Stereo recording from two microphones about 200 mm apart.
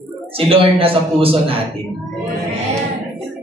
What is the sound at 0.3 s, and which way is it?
A man's voice, 30° right (ahead or behind).